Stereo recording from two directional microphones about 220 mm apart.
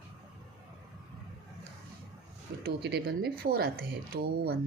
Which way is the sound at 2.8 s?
50° right (ahead or behind).